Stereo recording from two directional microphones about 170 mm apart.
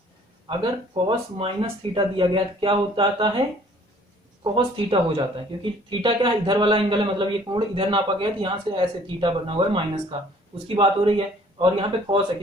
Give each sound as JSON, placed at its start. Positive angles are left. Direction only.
{"t": 0.4, "sound": "a man's voice", "side_deg": -30}
{"t": 4.5, "sound": "a man's voice", "side_deg": -30}